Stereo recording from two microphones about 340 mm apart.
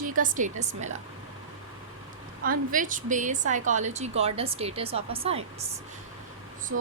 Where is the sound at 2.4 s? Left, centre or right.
Right.